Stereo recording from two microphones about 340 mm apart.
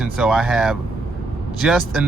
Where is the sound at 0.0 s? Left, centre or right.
Centre.